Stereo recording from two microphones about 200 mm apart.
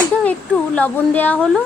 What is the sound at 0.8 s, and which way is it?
Speech, 10° left (ahead or behind).